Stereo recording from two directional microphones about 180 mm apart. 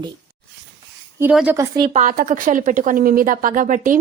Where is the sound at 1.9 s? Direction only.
45° right (ahead or behind).